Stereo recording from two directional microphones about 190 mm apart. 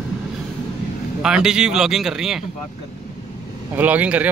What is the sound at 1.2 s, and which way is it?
Speech, 5° right (ahead or behind).